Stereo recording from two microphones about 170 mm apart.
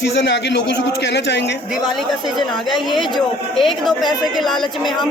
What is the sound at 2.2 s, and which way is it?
Speech, centre (ahead or behind).